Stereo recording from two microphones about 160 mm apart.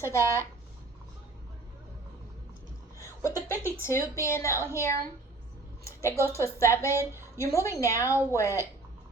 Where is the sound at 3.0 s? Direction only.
20° left (ahead or behind).